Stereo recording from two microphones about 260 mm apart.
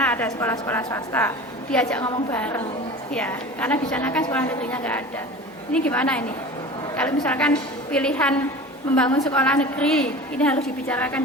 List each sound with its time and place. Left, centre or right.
0.0 s a woman's voice: centre